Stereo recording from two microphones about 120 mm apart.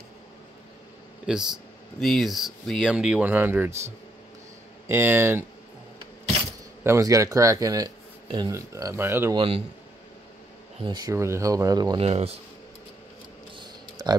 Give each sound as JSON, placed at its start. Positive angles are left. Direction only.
{"t": 1.2, "sound": "speech", "side_deg": -5}
{"t": 4.8, "sound": "speech", "side_deg": -20}
{"t": 6.8, "sound": "speech", "side_deg": -25}
{"t": 9.3, "sound": "a man's voice", "side_deg": -45}
{"t": 10.8, "sound": "speech", "side_deg": -40}
{"t": 11.1, "sound": "speech", "side_deg": -25}
{"t": 12.0, "sound": "speech", "side_deg": -55}
{"t": 13.6, "sound": "a sound", "side_deg": -35}